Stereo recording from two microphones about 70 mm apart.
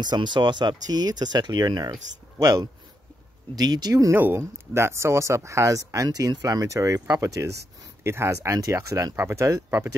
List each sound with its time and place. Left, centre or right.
0.0 s speech: right
4.1 s speech: right
4.4 s speech: right
6.0 s speech: right